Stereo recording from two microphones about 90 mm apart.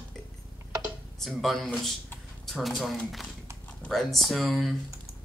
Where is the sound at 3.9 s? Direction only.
Centre (ahead or behind).